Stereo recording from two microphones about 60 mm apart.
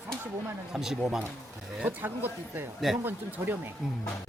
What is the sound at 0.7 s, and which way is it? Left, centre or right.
Speech, centre.